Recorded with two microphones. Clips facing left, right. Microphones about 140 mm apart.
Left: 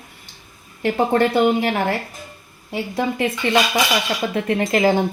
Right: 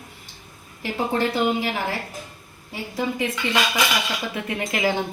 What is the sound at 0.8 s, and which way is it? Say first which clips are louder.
A woman's voice: left 6 dB; 60° left (ahead or behind).